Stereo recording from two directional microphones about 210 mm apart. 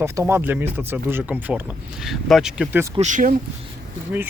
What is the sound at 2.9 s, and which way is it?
Speech, 35° right (ahead or behind).